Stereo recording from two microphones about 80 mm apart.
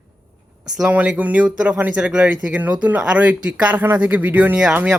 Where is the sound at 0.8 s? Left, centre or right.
Centre.